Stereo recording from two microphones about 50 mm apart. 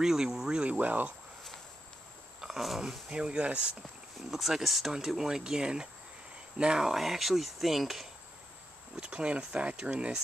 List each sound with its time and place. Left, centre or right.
0.0 s speech: centre
0.7 s speech: right
2.4 s speech: centre
3.1 s speech: right
4.3 s speech: centre
8.9 s speech: centre